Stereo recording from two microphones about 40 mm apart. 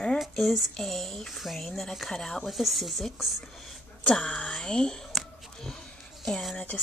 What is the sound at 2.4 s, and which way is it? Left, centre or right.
Speech, centre.